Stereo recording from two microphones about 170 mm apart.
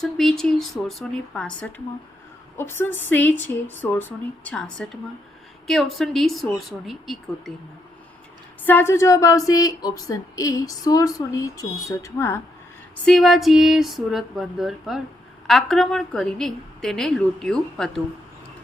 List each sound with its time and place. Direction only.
0.0 s a woman's voice: centre (ahead or behind)
8.6 s a sound: 10° left (ahead or behind)
13.1 s a woman's voice: centre (ahead or behind)